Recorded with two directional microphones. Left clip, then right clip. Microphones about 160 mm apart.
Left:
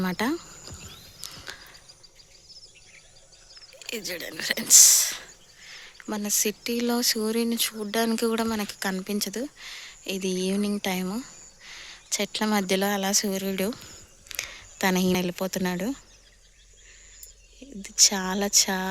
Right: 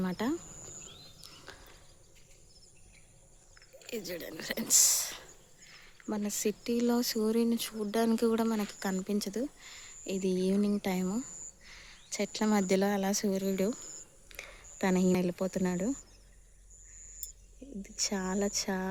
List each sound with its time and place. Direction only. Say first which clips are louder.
0.0 s speech: left 7 dB; 15° left (ahead or behind)
1.2 s a sound: left 15 dB; 5° left (ahead or behind)
3.8 s speech: left 6 dB; centre (ahead or behind)
17.8 s speech: left 12 dB; 5° right (ahead or behind)